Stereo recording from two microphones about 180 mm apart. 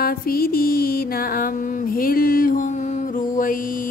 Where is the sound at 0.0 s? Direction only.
55° left (ahead or behind).